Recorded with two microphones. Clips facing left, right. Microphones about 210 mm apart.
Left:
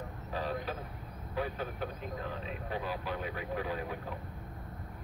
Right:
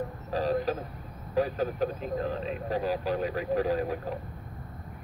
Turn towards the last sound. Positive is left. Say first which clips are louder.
# right 9 dB
turn(degrees=-40)  # may be behind; listen again after turning